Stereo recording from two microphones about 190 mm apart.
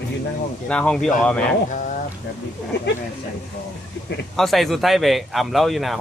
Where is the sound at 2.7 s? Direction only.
65° left (ahead or behind).